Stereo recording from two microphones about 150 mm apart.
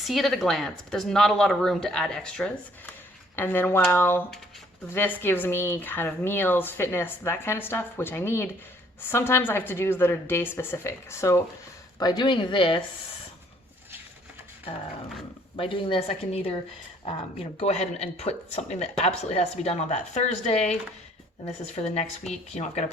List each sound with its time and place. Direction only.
0.0 s a woman's voice: centre (ahead or behind); by 12.8 s 35° left (ahead or behind)
15.5 s a woman's voice: 35° left (ahead or behind)
17.6 s speech: 45° left (ahead or behind)